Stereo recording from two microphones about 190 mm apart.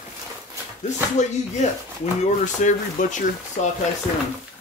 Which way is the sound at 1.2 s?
40° left (ahead or behind).